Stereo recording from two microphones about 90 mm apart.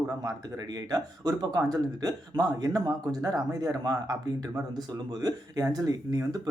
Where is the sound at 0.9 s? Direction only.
45° right (ahead or behind).